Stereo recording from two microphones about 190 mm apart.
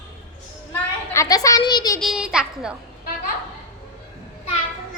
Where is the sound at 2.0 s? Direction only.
5° right (ahead or behind).